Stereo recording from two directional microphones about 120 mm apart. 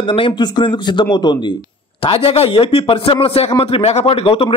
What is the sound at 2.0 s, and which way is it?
Speech, 55° left (ahead or behind).